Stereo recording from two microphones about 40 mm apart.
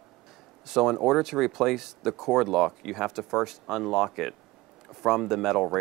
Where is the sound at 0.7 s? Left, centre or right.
Centre.